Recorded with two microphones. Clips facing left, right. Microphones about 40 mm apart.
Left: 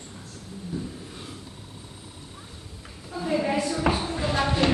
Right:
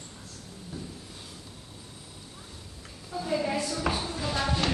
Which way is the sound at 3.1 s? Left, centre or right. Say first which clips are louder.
Left 4 dB; centre.